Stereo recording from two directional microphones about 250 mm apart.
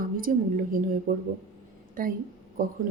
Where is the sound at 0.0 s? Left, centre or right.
Right.